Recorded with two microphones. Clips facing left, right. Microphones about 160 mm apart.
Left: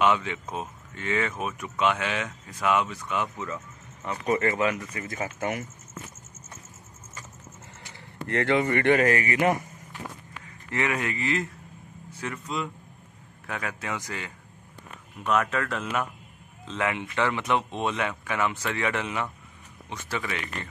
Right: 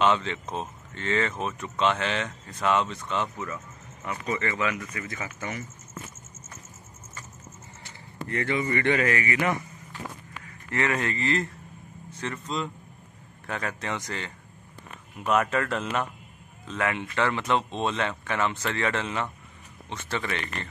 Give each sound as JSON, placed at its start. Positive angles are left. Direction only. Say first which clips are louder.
{"t": 0.0, "sound": "speech", "louder": "even", "side_deg": 10}
{"t": 4.3, "sound": "a man's voice", "louder": "left 4 dB", "side_deg": 45}
{"t": 5.4, "sound": "speech", "louder": "left 6 dB", "side_deg": 55}
{"t": 8.3, "sound": "a man's voice", "louder": "left 4 dB", "side_deg": 75}
{"t": 10.7, "sound": "speech", "louder": "right 1 dB", "side_deg": 15}
{"t": 15.2, "sound": "speech", "louder": "right 1 dB", "side_deg": -5}
{"t": 16.6, "sound": "speech", "louder": "even", "side_deg": 20}